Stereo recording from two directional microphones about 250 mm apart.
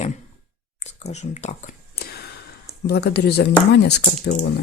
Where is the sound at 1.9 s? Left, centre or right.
Left.